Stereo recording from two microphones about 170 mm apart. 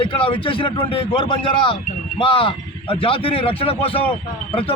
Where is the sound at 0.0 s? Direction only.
30° left (ahead or behind).